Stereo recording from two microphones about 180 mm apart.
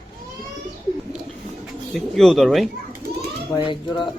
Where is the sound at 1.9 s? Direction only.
Centre (ahead or behind).